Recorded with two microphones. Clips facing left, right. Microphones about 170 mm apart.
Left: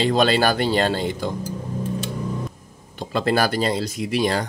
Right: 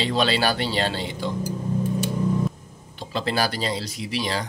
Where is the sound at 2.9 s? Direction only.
50° left (ahead or behind).